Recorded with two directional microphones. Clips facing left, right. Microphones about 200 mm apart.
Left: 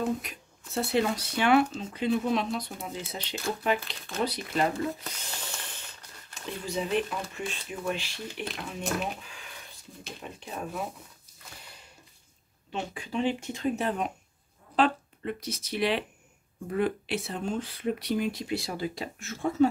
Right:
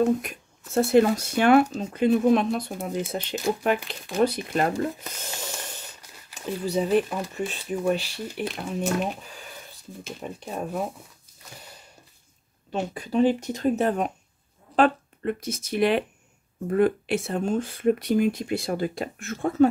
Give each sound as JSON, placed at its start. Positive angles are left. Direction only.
{"t": 0.2, "sound": "speech", "side_deg": -50}
{"t": 5.1, "sound": "a sound", "side_deg": -45}
{"t": 6.6, "sound": "speech", "side_deg": -40}
{"t": 8.8, "sound": "speech", "side_deg": 0}
{"t": 10.2, "sound": "speech", "side_deg": -45}
{"t": 12.7, "sound": "speech", "side_deg": -40}